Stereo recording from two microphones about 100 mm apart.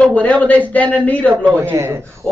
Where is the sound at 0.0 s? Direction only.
15° left (ahead or behind).